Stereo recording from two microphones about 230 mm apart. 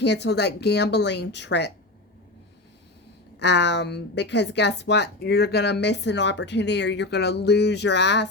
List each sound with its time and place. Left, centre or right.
0.0 s a woman's voice: left
3.3 s a woman's voice: left